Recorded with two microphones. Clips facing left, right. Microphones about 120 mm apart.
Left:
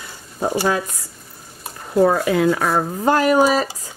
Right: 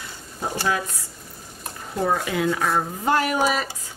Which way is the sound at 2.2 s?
40° left (ahead or behind).